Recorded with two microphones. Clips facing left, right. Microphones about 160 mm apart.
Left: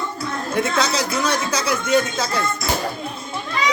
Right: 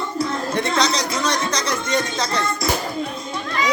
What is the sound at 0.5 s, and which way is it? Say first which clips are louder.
A man's voice: left 2 dB; 5° left (ahead or behind).